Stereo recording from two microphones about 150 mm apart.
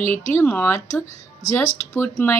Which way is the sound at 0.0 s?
15° left (ahead or behind).